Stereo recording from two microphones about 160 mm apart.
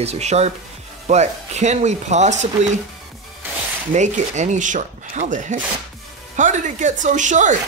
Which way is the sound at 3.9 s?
50° right (ahead or behind).